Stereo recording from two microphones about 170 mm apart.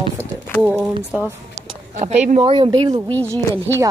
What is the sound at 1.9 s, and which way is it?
Speech, 45° right (ahead or behind).